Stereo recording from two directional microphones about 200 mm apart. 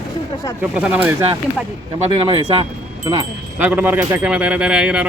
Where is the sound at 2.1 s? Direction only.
25° right (ahead or behind).